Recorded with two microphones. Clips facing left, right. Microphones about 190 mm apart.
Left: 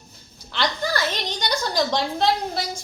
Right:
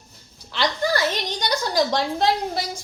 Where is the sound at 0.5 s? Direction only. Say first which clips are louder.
Right 2 dB; 10° right (ahead or behind).